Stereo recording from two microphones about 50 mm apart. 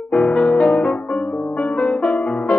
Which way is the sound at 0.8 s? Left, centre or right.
Left.